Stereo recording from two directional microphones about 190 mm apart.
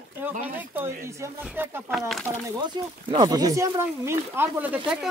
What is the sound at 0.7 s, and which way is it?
Speech, 10° right (ahead or behind).